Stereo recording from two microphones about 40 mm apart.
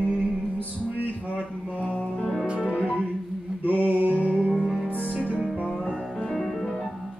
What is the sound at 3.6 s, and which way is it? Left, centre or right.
Music, right.